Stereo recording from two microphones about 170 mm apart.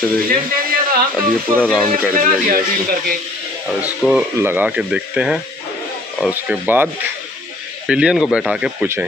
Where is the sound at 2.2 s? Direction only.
55° right (ahead or behind).